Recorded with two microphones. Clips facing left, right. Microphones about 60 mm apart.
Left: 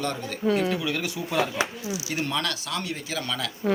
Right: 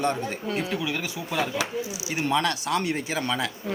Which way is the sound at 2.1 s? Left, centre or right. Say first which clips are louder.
Right 5 dB; centre.